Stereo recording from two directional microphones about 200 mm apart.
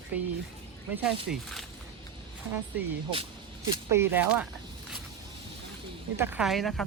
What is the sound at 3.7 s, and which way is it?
Speech, 15° right (ahead or behind).